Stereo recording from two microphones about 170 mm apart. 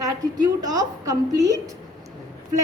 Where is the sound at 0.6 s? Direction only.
20° right (ahead or behind).